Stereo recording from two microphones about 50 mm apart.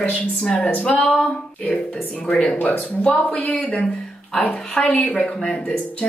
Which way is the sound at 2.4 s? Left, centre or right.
Left.